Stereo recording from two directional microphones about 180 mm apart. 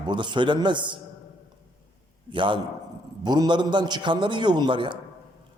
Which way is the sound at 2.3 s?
25° right (ahead or behind).